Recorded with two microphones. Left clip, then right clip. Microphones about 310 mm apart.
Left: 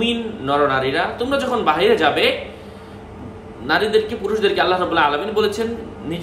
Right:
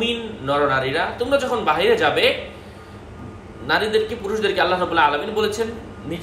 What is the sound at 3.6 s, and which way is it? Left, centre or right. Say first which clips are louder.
Speech: left 2 dB; centre.